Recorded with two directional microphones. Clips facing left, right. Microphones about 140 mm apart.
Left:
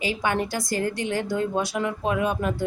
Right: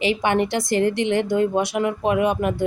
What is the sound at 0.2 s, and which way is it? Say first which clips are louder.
A woman's voice: right 5 dB; 20° right (ahead or behind).